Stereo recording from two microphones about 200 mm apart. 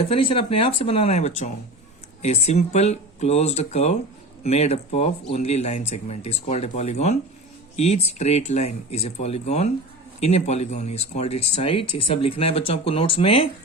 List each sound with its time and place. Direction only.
0.0 s speech: 30° left (ahead or behind)